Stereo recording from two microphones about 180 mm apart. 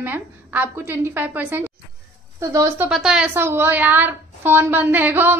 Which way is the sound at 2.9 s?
5° right (ahead or behind).